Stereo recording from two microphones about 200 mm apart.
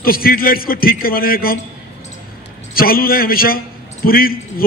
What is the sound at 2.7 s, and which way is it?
A man's voice, 45° left (ahead or behind).